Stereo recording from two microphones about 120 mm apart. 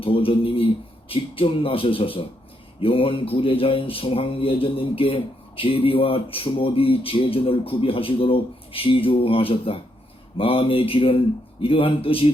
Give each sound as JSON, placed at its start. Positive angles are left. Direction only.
{"t": 0.0, "sound": "speech", "side_deg": 50}